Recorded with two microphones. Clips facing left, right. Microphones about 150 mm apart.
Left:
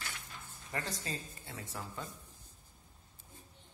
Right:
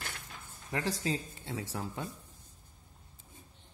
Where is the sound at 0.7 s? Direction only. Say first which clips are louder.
Right 7 dB; 90° right.